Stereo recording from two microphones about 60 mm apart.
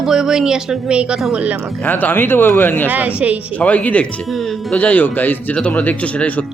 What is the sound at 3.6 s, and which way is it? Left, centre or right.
Speech, left.